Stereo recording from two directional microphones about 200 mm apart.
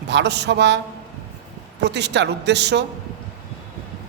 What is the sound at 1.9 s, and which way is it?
Speech, 60° right (ahead or behind).